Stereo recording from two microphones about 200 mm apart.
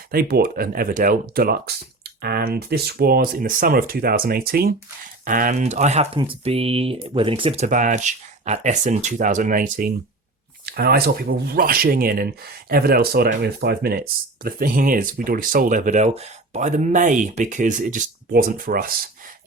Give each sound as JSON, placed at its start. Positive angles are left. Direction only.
{"t": 0.1, "sound": "speech", "side_deg": -50}